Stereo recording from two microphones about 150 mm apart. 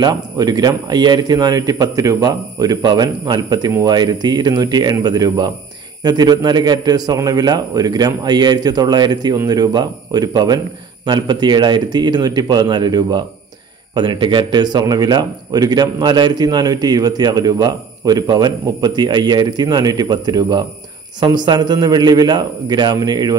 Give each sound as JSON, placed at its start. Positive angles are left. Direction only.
{"t": 0.0, "sound": "a man's voice", "side_deg": -25}